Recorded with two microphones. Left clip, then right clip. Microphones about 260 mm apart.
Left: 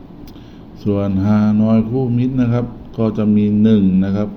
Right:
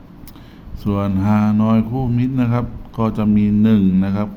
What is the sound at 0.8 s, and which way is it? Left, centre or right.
Speech, centre.